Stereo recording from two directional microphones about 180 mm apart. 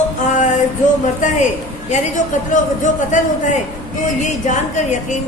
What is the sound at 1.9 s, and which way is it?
A woman's voice, 45° left (ahead or behind).